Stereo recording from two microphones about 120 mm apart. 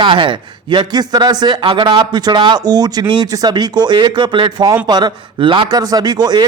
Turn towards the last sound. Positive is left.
turn(degrees=-35)  # may be behind; listen again after turning